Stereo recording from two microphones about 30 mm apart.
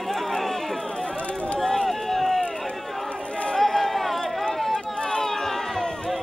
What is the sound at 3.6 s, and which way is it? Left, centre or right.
Chatter, centre.